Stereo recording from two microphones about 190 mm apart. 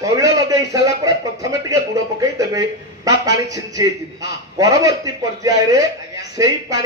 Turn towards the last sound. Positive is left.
turn(degrees=-20)  # may be behind; listen again after turning